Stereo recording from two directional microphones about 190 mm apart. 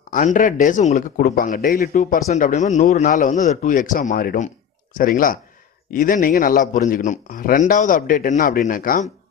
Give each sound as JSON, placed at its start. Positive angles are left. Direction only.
{"t": 0.1, "sound": "a man's voice", "side_deg": 40}
{"t": 2.0, "sound": "a man's voice", "side_deg": 40}